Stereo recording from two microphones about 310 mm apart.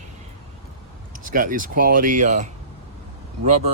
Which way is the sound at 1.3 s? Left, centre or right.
Right.